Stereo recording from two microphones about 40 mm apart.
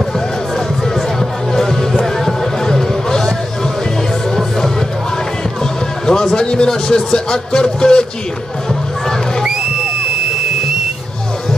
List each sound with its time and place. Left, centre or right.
1.5 s music: centre
2.2 s a sound: centre
6.0 s a man's voice: centre